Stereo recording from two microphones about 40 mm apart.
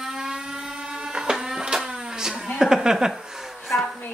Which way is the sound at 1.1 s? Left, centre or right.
Centre.